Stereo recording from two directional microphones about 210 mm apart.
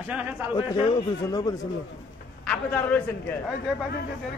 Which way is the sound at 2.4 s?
5° left (ahead or behind).